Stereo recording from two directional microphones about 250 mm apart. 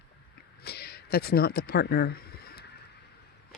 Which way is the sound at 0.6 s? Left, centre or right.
Left.